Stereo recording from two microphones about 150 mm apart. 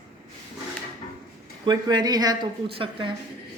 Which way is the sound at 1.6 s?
30° right (ahead or behind).